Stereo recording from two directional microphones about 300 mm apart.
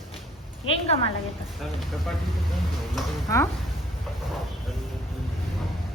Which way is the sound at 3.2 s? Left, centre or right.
Centre.